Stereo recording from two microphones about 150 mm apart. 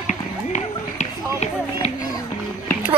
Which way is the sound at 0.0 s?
50° left (ahead or behind).